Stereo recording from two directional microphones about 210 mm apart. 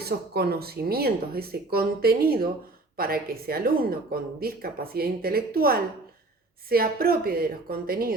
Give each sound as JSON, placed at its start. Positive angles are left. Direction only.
{"t": 0.0, "sound": "speech", "side_deg": -50}